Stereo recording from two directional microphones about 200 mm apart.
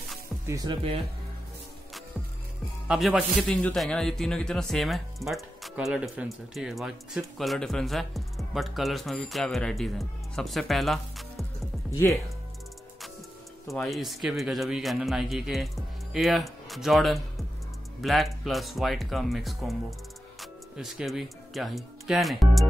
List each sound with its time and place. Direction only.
0.5 s speech: 20° right (ahead or behind)
2.9 s a man's voice: 5° right (ahead or behind)
13.7 s a man's voice: centre (ahead or behind)